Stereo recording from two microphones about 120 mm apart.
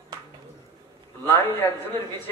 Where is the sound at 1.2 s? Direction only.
15° left (ahead or behind).